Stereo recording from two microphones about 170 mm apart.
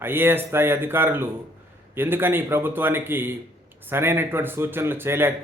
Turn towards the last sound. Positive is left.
turn(degrees=-15)  # may be behind; listen again after turning